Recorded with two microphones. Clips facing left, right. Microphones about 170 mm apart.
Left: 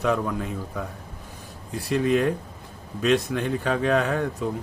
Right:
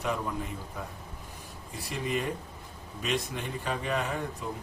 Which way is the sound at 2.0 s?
90° left.